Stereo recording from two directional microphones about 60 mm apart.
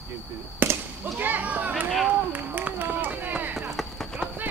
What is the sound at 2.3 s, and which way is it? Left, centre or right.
Run, right.